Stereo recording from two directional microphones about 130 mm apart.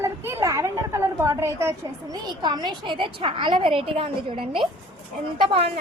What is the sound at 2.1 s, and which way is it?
A woman's voice, 35° right (ahead or behind).